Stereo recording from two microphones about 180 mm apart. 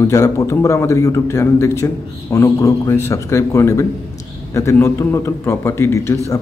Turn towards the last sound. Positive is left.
turn(degrees=15)  # may be behind; listen again after turning